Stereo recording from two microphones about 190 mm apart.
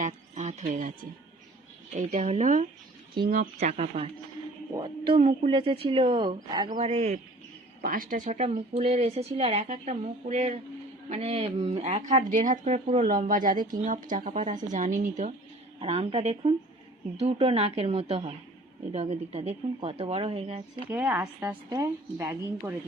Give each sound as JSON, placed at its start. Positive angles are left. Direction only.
{"t": 0.0, "sound": "a woman's voice", "side_deg": -35}
{"t": 3.6, "sound": "a woman's voice", "side_deg": -35}
{"t": 6.7, "sound": "a woman's voice", "side_deg": -35}
{"t": 7.8, "sound": "a woman's voice", "side_deg": -50}
{"t": 15.8, "sound": "a woman's voice", "side_deg": -30}
{"t": 20.9, "sound": "a woman's voice", "side_deg": -10}